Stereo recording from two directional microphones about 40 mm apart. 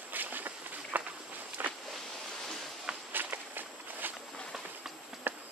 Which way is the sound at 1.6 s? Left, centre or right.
Right.